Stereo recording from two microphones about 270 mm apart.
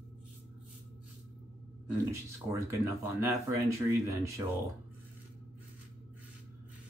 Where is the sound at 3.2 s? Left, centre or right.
Centre.